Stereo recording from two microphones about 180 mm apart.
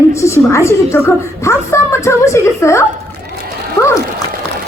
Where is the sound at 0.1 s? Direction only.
15° left (ahead or behind).